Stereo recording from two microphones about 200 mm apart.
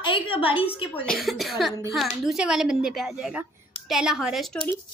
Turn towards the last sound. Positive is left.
turn(degrees=0)  # may be behind; listen again after turning